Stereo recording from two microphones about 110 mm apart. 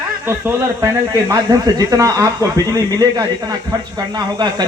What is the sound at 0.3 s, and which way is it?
Speech, 25° right (ahead or behind).